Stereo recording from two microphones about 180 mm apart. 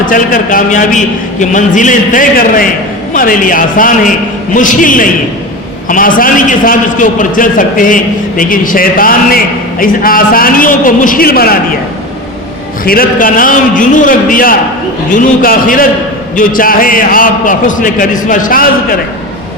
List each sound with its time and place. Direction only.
0.0 s a man's voice: 50° left (ahead or behind)
12.8 s a man's voice: 55° left (ahead or behind)